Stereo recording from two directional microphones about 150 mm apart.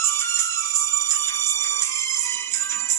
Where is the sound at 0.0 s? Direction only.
15° left (ahead or behind).